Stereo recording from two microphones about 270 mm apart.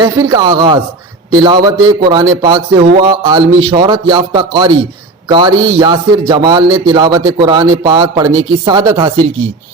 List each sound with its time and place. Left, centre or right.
0.0 s a man's voice: centre